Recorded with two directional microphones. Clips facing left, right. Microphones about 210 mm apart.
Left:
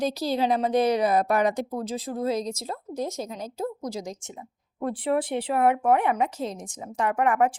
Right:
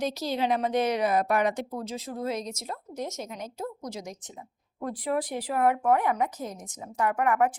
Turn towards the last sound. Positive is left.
turn(degrees=30)  # may be behind; listen again after turning